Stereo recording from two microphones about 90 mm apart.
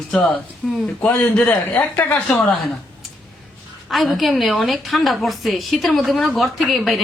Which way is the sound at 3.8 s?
Centre (ahead or behind).